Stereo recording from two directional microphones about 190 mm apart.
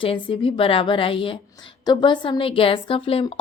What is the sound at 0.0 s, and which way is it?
A woman's voice, 30° left (ahead or behind).